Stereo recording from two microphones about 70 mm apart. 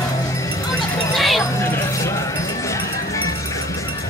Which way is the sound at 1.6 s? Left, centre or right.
Left.